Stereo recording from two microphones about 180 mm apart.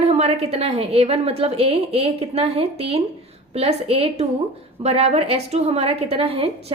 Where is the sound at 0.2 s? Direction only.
35° right (ahead or behind).